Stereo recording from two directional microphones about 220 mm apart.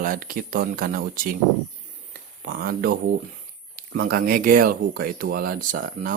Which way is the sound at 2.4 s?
45° right (ahead or behind).